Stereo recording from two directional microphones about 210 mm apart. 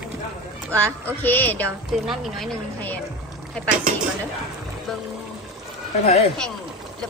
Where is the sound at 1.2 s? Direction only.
10° left (ahead or behind).